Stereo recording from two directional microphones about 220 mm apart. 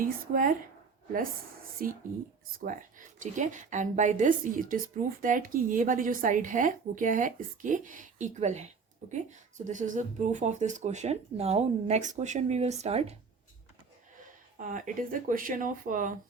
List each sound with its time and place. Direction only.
0.0 s speech: 40° right (ahead or behind)
1.8 s speech: 40° right (ahead or behind)
3.2 s speech: 35° right (ahead or behind)
14.6 s speech: 35° right (ahead or behind)